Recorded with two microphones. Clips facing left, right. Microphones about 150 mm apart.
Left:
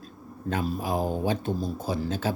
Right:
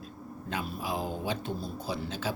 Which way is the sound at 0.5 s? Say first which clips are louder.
Left 6 dB; 45° left (ahead or behind).